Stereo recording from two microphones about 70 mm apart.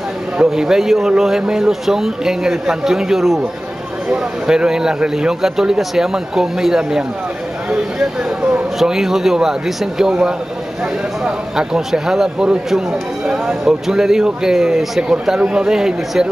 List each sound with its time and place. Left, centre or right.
0.4 s a man's voice: centre
8.4 s speech: centre
8.7 s a man's voice: centre